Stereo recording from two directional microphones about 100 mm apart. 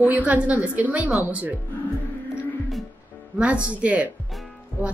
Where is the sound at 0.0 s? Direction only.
15° right (ahead or behind).